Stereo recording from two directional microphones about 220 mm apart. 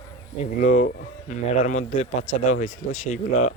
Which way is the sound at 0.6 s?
35° left (ahead or behind).